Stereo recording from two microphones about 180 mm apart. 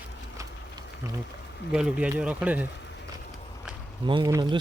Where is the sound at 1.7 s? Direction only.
5° right (ahead or behind).